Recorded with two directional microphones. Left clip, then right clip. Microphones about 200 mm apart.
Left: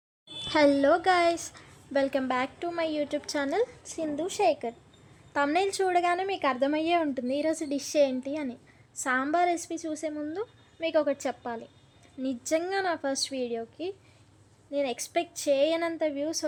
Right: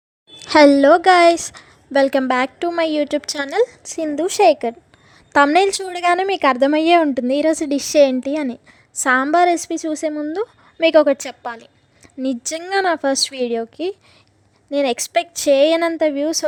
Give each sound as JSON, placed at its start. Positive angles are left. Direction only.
{"t": 0.3, "sound": "a woman's voice", "side_deg": -40}